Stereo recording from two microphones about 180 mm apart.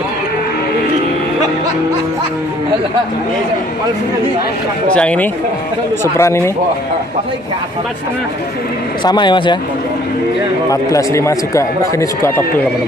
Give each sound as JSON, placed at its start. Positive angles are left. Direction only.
{"t": 4.9, "sound": "speech", "side_deg": 5}
{"t": 9.0, "sound": "speech", "side_deg": 25}
{"t": 10.7, "sound": "speech", "side_deg": 20}